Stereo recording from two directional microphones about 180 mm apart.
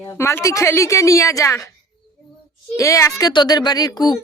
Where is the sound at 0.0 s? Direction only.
15° left (ahead or behind).